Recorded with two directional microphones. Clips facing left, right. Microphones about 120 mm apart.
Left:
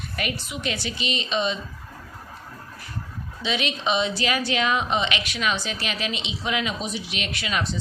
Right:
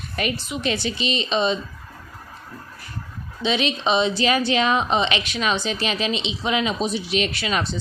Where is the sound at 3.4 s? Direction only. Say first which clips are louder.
Right 5 dB; 30° right (ahead or behind).